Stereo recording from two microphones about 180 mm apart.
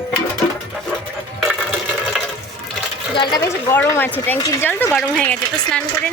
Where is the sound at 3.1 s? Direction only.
25° left (ahead or behind).